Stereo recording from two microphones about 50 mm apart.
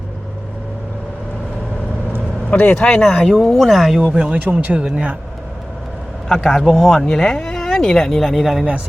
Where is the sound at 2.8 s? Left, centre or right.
Centre.